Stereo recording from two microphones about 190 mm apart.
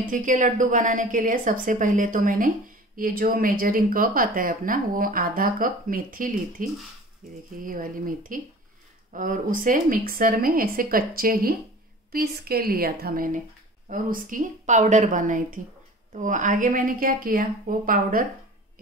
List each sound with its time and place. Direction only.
0.1 s speech: 40° right (ahead or behind)